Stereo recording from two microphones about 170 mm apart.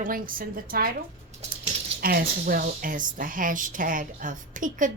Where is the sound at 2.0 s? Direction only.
60° right (ahead or behind).